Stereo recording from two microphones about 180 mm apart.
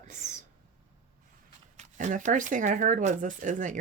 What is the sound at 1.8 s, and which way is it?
Speech, 45° right (ahead or behind).